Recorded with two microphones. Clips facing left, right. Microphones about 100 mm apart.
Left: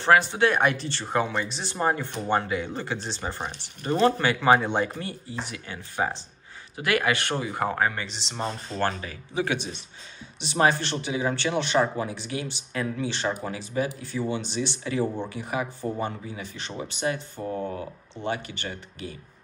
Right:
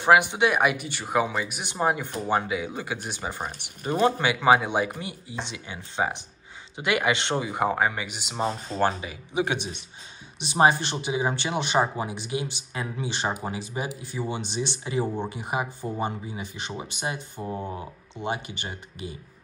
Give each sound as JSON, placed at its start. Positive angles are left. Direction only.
{"t": 0.0, "sound": "speech", "side_deg": -15}